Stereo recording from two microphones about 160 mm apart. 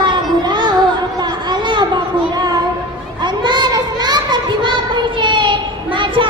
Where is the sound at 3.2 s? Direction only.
30° right (ahead or behind).